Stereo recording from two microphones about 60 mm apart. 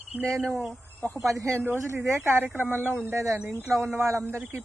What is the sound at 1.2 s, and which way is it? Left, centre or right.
Speech, right.